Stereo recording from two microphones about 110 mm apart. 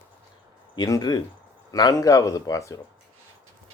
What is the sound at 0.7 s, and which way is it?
Mantra, 40° left (ahead or behind).